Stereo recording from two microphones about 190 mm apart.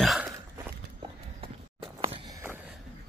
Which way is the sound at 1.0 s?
25° right (ahead or behind).